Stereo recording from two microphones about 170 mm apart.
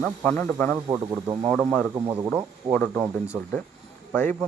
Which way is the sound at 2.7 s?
5° left (ahead or behind).